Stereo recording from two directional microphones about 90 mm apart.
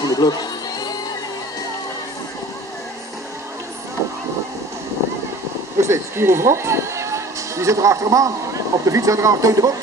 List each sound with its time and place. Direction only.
0.0 s music: 45° left (ahead or behind)
5.8 s speech: 30° right (ahead or behind)